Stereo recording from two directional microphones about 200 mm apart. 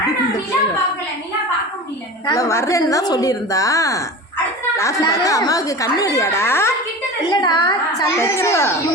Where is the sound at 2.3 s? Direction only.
15° left (ahead or behind).